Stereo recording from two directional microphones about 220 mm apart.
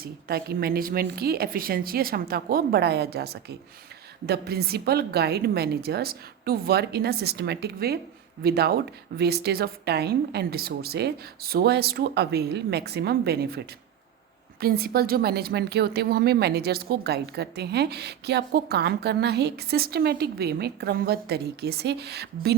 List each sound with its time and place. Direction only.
0.0 s a woman's voice: 45° right (ahead or behind)